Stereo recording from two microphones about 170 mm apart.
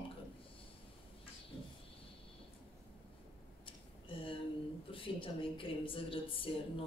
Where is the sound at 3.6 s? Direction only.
30° left (ahead or behind).